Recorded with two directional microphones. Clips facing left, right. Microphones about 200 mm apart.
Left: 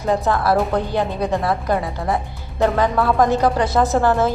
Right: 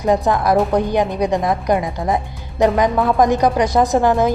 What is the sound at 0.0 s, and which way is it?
A woman's voice, 15° right (ahead or behind).